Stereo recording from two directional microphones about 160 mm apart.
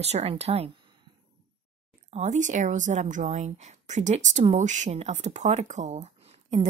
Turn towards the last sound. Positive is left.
turn(degrees=-45)  # may be behind; listen again after turning